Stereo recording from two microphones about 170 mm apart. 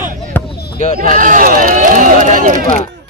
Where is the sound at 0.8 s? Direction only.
35° left (ahead or behind).